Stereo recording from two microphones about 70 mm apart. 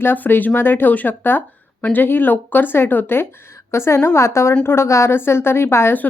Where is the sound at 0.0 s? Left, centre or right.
Left.